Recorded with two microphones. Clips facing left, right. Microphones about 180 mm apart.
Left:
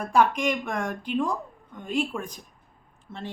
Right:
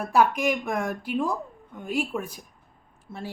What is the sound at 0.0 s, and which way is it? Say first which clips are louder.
A woman's voice: even; 5° right (ahead or behind).